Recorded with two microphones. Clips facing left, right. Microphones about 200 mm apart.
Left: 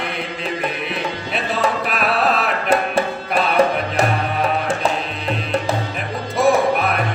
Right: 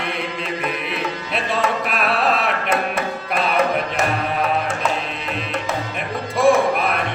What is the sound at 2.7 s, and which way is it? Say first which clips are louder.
Music: left 7 dB; 30° left (ahead or behind).